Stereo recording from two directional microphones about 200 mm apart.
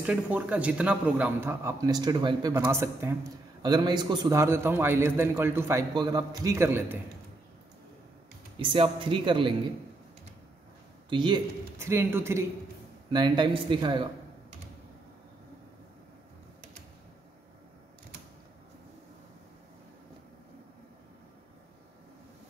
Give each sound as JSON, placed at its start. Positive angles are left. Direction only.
{"t": 0.0, "sound": "a man's voice", "side_deg": -5}
{"t": 8.5, "sound": "speech", "side_deg": -25}
{"t": 11.1, "sound": "a man's voice", "side_deg": -25}